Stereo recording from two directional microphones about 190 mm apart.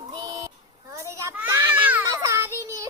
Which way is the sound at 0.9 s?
15° right (ahead or behind).